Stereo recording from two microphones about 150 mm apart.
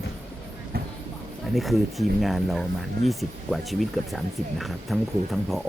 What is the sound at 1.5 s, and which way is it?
Speech, centre (ahead or behind).